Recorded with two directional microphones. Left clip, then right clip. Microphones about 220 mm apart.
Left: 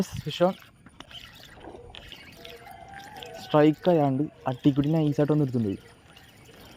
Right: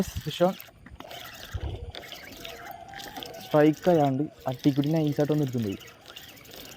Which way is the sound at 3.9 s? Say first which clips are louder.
Even; 5° left (ahead or behind).